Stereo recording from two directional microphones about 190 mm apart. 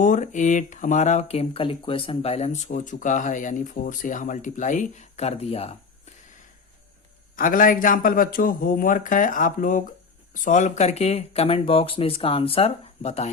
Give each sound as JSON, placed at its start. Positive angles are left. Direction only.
{"t": 0.0, "sound": "speech", "side_deg": 40}
{"t": 7.3, "sound": "a man's voice", "side_deg": 45}